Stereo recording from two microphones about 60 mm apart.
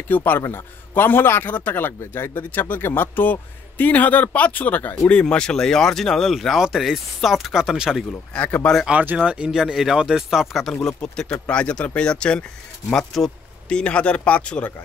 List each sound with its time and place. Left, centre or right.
0.1 s a man's voice: left
2.3 s a man's voice: left; by 8.0 s centre
8.1 s speech: centre
9.0 s speech: centre
11.0 s a man's voice: centre
12.9 s speech: centre
13.7 s a man's voice: centre